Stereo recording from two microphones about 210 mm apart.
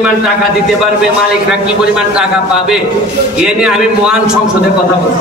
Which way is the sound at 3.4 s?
5° right (ahead or behind).